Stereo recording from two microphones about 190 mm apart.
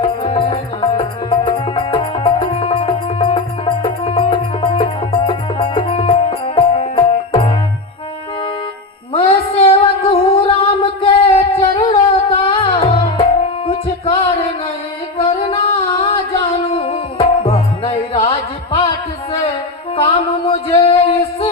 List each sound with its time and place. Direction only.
0.0 s music: 30° left (ahead or behind)
9.1 s female singing: 30° left (ahead or behind)
11.9 s a sound: 30° left (ahead or behind)
12.8 s music: 25° left (ahead or behind)
20.0 s a sound: 25° left (ahead or behind)
20.8 s music: 30° left (ahead or behind)